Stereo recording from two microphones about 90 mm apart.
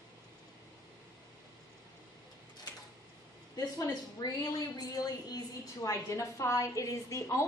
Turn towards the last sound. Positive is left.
turn(degrees=35)  # may be behind; listen again after turning